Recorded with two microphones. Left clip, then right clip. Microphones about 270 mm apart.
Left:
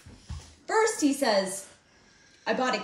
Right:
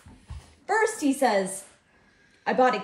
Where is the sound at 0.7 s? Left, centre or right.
Right.